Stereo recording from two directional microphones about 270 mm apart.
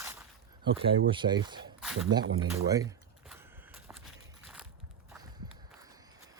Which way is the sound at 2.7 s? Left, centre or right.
Centre.